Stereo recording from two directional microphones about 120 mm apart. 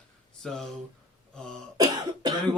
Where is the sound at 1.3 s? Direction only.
5° left (ahead or behind).